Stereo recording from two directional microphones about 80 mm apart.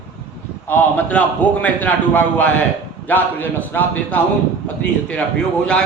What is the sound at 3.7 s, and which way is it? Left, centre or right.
Speech, left.